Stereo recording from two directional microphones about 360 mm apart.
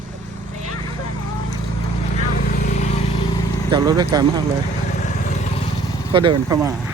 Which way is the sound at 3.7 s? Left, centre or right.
Centre.